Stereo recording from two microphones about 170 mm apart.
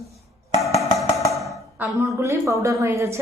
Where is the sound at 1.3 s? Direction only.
Centre (ahead or behind).